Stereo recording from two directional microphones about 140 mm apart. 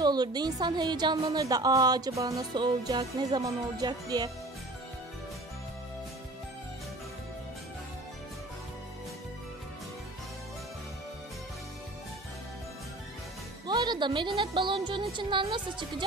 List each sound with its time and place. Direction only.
0.0 s a woman's voice: 30° right (ahead or behind)
13.7 s speech: 30° right (ahead or behind)